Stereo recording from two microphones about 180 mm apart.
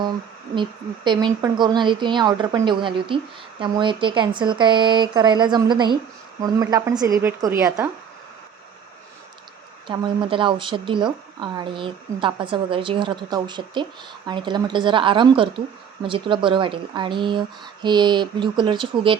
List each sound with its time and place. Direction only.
0.5 s speech: 25° right (ahead or behind)
9.8 s speech: 25° right (ahead or behind)